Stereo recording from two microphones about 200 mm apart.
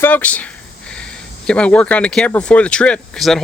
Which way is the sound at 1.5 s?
5° left (ahead or behind).